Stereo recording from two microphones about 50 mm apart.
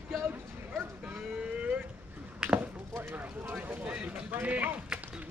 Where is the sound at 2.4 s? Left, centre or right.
Centre.